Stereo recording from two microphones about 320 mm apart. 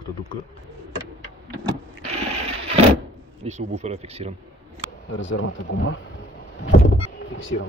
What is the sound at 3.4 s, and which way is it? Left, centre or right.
Speech, centre.